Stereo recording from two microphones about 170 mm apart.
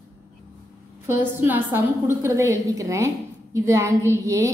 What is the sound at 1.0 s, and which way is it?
A woman's voice, 15° right (ahead or behind).